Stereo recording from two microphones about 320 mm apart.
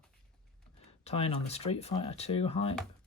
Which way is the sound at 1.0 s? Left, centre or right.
Centre.